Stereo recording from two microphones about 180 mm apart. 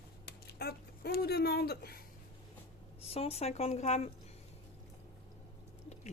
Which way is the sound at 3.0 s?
35° left (ahead or behind).